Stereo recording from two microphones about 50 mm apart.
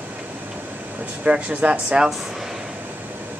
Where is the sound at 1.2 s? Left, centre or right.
Right.